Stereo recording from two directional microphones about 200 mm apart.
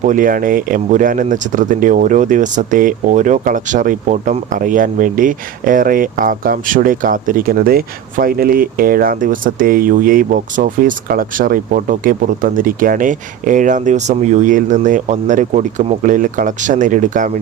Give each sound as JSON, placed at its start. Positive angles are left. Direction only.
{"t": 0.0, "sound": "speech", "side_deg": -40}